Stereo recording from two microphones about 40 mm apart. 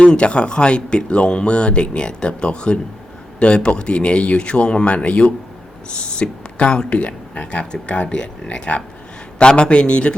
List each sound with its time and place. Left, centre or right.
0.0 s speech: left